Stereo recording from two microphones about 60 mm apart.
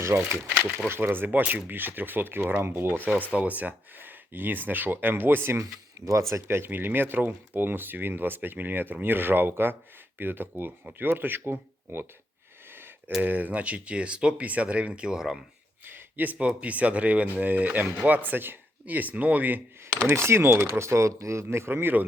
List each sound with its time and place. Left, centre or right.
0.1 s speech: right
3.3 s speech: right
6.1 s speech: right
13.2 s speech: right; by 15.4 s centre
15.9 s speech: right
20.1 s speech: right